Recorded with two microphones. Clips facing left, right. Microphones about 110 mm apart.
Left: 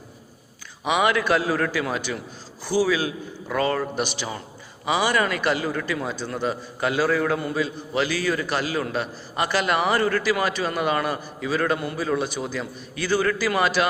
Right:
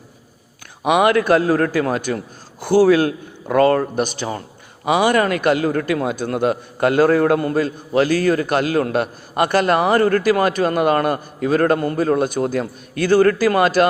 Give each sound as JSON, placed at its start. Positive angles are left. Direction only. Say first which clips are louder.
{"t": 0.9, "sound": "a man's voice", "louder": "right 6 dB", "side_deg": -50}